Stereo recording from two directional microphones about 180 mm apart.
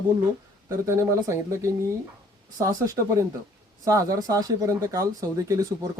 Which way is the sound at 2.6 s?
15° right (ahead or behind).